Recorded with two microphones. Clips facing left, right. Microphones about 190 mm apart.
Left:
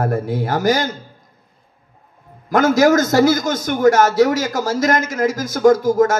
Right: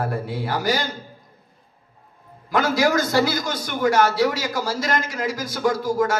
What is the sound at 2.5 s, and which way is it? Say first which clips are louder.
Speech: left 7 dB; 45° left (ahead or behind).